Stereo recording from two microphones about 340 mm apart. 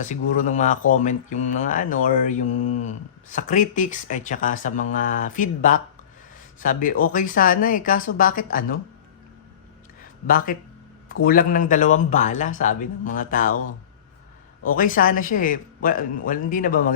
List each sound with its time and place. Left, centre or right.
0.0 s speech: left
10.0 s a sound: left
11.1 s speech: left
14.6 s speech: left